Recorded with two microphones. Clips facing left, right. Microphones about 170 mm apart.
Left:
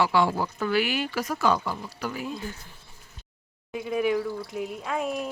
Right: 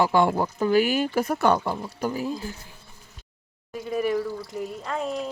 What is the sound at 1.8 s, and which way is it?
Speech, 35° right (ahead or behind).